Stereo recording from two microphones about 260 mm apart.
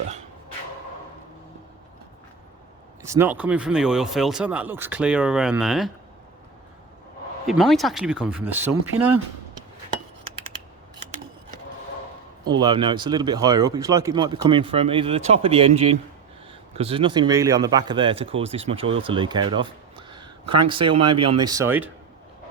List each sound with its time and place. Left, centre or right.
3.0 s speech: centre
7.4 s speech: centre
12.5 s speech: centre